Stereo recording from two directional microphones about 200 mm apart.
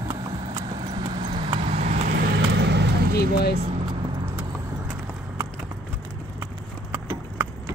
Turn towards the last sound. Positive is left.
turn(degrees=-10)  # may be behind; listen again after turning